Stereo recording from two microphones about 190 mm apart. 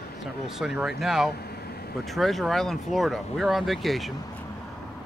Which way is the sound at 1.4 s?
55° left (ahead or behind).